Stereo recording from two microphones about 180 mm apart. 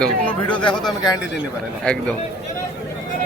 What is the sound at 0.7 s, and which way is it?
Speech, 20° left (ahead or behind).